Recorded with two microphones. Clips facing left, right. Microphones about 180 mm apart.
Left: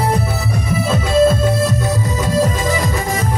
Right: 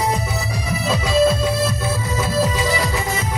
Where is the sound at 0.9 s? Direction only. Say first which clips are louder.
Left 3 dB; 50° left (ahead or behind).